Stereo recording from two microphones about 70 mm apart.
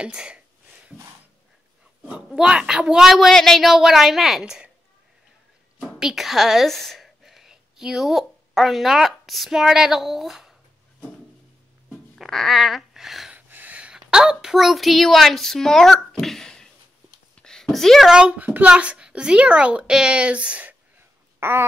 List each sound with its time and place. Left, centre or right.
0.0 s a child's voice: centre
2.2 s a woman's voice: centre
5.9 s a woman's voice: centre
11.9 s music: centre
13.5 s a sound: right
14.3 s a woman's voice: centre
17.4 s a sound: centre
18.1 s a child's voice: centre
21.4 s a sound: right